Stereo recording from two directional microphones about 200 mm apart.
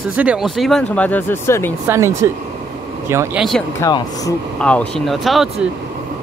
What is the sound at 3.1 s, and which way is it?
Speech, 15° right (ahead or behind).